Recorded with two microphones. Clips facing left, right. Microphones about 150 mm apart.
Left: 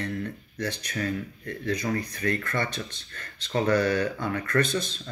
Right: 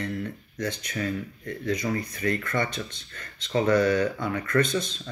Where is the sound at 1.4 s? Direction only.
60° left (ahead or behind).